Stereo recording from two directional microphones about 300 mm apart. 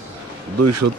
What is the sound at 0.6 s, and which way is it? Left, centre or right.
Speech, right.